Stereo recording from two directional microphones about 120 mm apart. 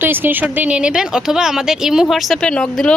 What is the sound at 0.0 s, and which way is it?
A woman's voice, 15° right (ahead or behind).